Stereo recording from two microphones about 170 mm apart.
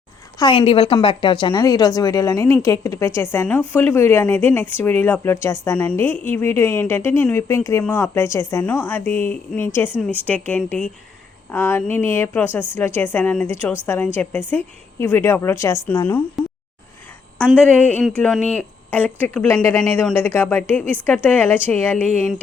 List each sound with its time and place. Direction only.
0.3 s a woman's voice: 30° left (ahead or behind); by 16.2 s 10° left (ahead or behind)
17.5 s speech: 5° left (ahead or behind)